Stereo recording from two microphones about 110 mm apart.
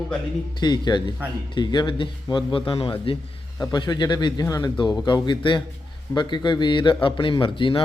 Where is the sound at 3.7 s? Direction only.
40° left (ahead or behind).